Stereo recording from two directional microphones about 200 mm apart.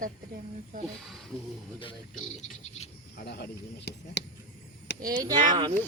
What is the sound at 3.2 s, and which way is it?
Speech, 55° left (ahead or behind).